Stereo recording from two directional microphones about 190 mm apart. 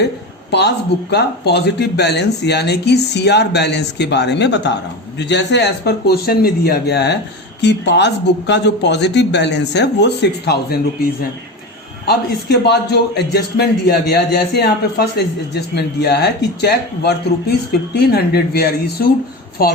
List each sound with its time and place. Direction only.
1.1 s speech: 60° left (ahead or behind)
12.0 s a woman's voice: 60° left (ahead or behind)